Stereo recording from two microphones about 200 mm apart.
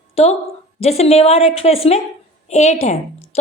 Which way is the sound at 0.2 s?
30° left (ahead or behind).